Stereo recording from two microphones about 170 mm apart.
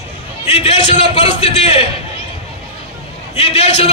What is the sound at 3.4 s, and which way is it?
Speech, 35° left (ahead or behind).